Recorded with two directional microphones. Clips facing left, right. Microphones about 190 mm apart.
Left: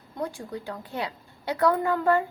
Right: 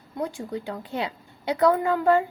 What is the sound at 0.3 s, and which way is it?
A woman's voice, 20° right (ahead or behind).